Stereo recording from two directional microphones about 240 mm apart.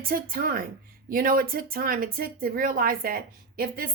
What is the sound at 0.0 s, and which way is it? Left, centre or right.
A woman's voice, right.